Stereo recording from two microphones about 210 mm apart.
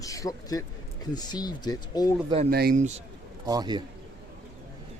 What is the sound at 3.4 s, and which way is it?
Speech, 20° right (ahead or behind).